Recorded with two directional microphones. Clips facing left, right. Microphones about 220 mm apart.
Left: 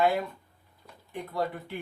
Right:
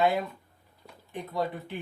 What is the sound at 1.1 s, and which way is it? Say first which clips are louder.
Speech: even; 20° right (ahead or behind).